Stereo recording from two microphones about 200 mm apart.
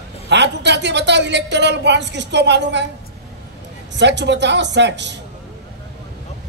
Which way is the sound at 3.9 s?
60° right (ahead or behind).